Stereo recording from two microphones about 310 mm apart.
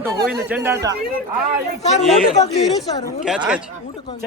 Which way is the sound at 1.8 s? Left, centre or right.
Left.